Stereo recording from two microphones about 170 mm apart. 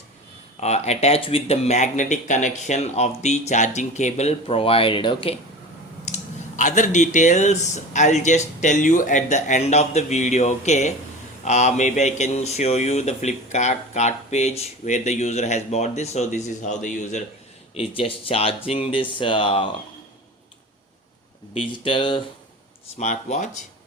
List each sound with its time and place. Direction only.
0.6 s speech: 40° left (ahead or behind)
6.1 s clicking: 40° left (ahead or behind)
6.6 s speech: 45° left (ahead or behind)
17.7 s speech: 30° left (ahead or behind)
21.5 s speech: 30° left (ahead or behind)
23.0 s speech: 45° left (ahead or behind)